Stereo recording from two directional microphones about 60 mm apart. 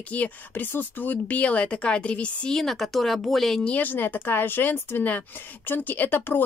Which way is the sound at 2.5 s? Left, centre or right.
Centre.